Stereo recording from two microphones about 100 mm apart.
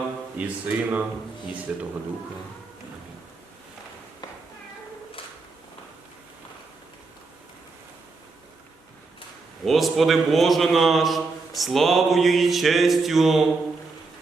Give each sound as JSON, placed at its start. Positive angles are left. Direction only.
{"t": 0.3, "sound": "speech", "side_deg": -15}
{"t": 9.6, "sound": "a man's voice", "side_deg": 0}